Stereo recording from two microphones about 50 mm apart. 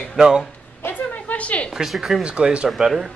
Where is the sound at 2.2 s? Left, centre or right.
Right.